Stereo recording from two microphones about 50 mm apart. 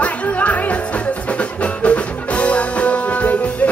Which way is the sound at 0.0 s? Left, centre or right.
Left.